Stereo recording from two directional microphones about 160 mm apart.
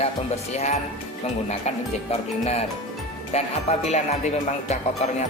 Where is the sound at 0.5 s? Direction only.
45° left (ahead or behind).